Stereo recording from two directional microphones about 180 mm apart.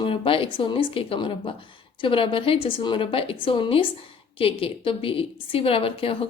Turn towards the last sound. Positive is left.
turn(degrees=30)  # may be behind; listen again after turning